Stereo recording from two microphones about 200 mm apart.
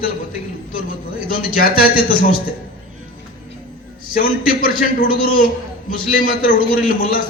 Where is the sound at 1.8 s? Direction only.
45° left (ahead or behind).